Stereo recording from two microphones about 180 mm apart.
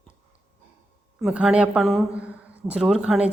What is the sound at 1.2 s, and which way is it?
A woman's voice, 5° right (ahead or behind).